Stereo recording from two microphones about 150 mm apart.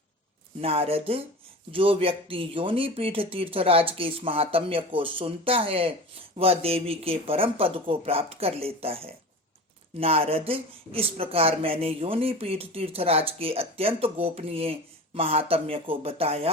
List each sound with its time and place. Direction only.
0.6 s speech: 40° right (ahead or behind)